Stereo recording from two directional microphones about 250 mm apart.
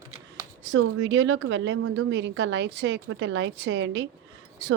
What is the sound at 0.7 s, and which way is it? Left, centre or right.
A woman's voice, right.